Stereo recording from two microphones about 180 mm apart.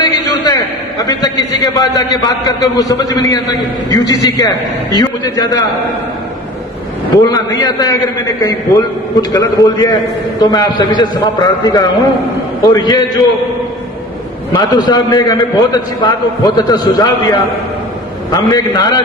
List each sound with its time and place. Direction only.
0.0 s a sound: 25° left (ahead or behind)
1.0 s a man's voice: 20° left (ahead or behind)
7.6 s a man's voice: 20° left (ahead or behind)
14.5 s a man's voice: 25° left (ahead or behind)